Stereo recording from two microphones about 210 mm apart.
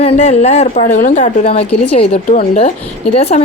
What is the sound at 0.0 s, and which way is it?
A woman's voice, 30° left (ahead or behind).